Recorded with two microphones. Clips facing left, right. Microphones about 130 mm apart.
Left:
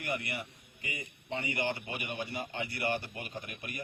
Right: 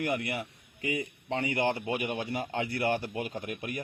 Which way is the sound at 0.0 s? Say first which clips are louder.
Right 6 dB; 90° right.